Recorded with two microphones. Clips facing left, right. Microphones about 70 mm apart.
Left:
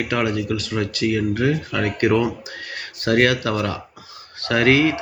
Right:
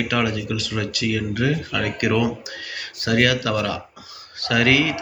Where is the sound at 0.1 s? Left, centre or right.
Left.